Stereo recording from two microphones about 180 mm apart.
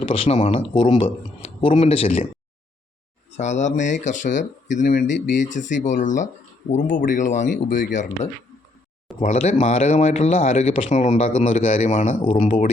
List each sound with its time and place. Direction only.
0.1 s a man's voice: 35° left (ahead or behind)
3.3 s a man's voice: 40° left (ahead or behind)